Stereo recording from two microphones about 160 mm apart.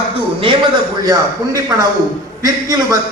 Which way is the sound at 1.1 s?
20° right (ahead or behind).